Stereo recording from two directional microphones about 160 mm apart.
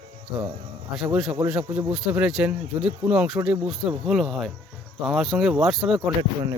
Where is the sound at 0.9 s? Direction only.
Centre (ahead or behind).